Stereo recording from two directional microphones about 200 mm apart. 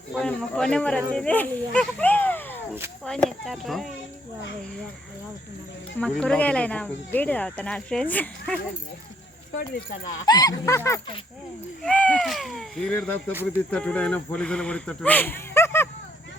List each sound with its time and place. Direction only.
0.1 s speech: 5° left (ahead or behind)
6.0 s speech: 5° left (ahead or behind)
9.6 s speech: 45° left (ahead or behind)
10.2 s speech: 20° left (ahead or behind)